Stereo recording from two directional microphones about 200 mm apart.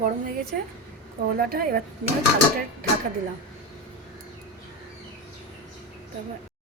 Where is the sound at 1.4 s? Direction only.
50° right (ahead or behind).